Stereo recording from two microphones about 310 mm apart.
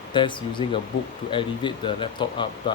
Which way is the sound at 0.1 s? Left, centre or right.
Centre.